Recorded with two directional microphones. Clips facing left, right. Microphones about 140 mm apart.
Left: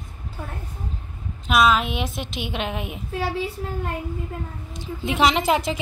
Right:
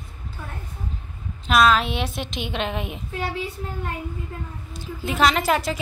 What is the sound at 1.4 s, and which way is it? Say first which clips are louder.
A woman's voice: right 1 dB; 5° left (ahead or behind).